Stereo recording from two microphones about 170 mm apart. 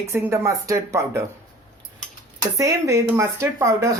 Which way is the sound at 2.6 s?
20° right (ahead or behind).